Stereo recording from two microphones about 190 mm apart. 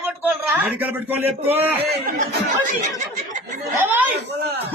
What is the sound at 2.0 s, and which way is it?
Speech, 45° right (ahead or behind).